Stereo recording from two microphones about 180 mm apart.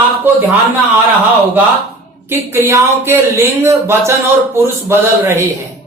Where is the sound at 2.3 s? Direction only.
15° right (ahead or behind).